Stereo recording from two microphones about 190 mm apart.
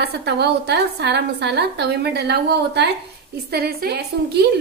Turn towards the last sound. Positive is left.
turn(degrees=-55)  # may be behind; listen again after turning